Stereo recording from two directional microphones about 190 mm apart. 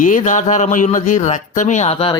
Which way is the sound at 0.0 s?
40° left (ahead or behind).